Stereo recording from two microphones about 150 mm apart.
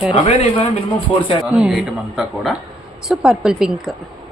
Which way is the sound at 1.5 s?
5° right (ahead or behind).